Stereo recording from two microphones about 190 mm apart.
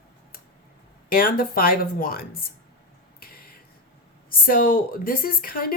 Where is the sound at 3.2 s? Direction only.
50° left (ahead or behind).